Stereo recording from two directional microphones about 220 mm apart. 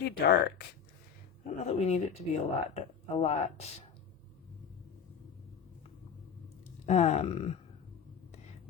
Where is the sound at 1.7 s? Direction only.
30° left (ahead or behind).